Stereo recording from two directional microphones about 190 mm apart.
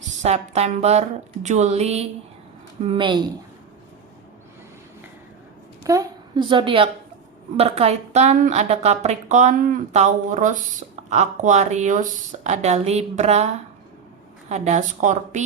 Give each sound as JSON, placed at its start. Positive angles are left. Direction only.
{"t": 0.2, "sound": "a woman's voice", "side_deg": -35}
{"t": 5.8, "sound": "a woman's voice", "side_deg": -15}
{"t": 14.5, "sound": "a woman's voice", "side_deg": -35}